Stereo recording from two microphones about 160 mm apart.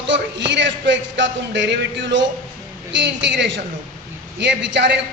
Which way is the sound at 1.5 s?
90° right.